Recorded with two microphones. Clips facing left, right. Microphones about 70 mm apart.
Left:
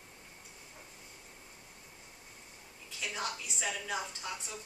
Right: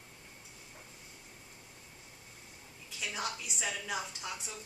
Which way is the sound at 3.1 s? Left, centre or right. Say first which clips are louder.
Even; centre.